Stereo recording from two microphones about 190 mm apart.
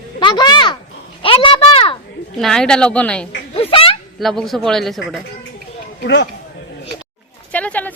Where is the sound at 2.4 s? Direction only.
5° left (ahead or behind).